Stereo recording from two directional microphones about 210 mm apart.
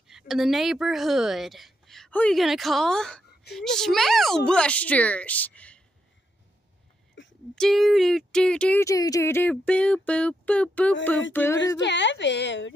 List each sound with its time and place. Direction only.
0.1 s a woman's voice: centre (ahead or behind)
3.5 s a sound: centre (ahead or behind)
4.5 s a woman's voice: 5° left (ahead or behind)
7.5 s a sound: centre (ahead or behind)
11.3 s a woman's voice: 15° left (ahead or behind)
11.8 s a woman's voice: 55° left (ahead or behind)